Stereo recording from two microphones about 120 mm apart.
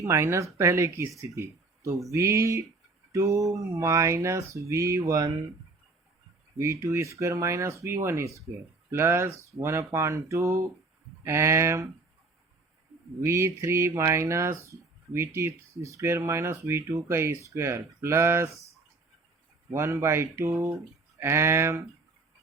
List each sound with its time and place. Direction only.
0.0 s speech: 25° right (ahead or behind)
6.6 s speech: 25° right (ahead or behind)
13.2 s speech: 25° right (ahead or behind)
19.7 s speech: 20° right (ahead or behind)